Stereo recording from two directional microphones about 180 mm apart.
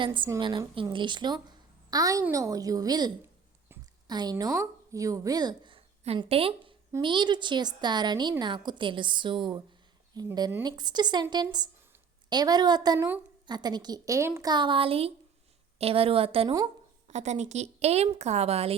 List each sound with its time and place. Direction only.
0.0 s a woman's voice: 25° right (ahead or behind)